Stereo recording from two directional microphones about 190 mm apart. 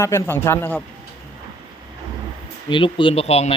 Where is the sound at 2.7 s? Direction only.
25° left (ahead or behind).